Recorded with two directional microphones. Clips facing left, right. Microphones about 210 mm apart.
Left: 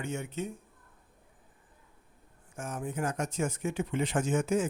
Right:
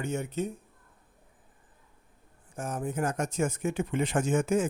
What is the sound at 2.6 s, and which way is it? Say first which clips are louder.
Speech: right 3 dB; 40° right (ahead or behind).